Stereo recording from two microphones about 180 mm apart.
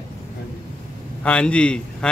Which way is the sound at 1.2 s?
5° left (ahead or behind).